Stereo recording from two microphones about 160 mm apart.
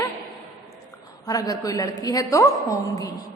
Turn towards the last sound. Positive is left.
turn(degrees=20)  # may be behind; listen again after turning